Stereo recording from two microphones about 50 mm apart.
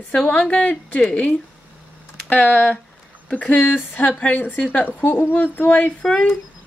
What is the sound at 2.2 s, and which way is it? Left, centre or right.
A woman's voice, left.